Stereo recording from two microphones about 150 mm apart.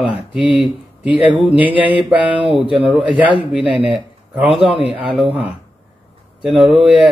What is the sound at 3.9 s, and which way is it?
Speech, centre (ahead or behind).